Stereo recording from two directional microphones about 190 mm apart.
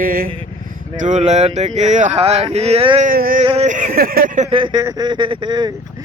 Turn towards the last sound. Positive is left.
turn(degrees=-25)  # may be behind; listen again after turning